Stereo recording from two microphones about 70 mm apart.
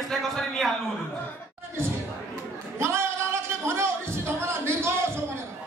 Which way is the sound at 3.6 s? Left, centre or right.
Right.